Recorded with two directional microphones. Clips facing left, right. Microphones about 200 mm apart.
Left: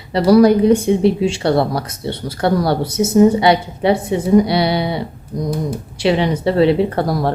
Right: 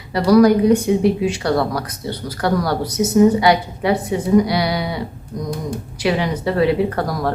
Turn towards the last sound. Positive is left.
turn(degrees=25)  # may be behind; listen again after turning